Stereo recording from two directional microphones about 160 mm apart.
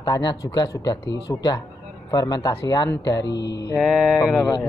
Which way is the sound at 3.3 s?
90° left.